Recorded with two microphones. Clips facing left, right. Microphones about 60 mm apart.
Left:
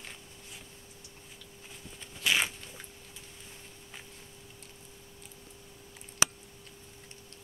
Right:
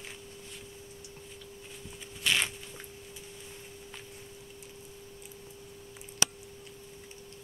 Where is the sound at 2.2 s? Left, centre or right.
Centre.